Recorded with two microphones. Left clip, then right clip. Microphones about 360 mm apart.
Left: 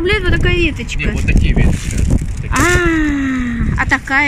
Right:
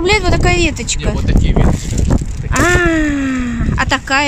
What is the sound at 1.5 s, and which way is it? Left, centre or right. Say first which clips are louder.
Speech: right 3 dB; right.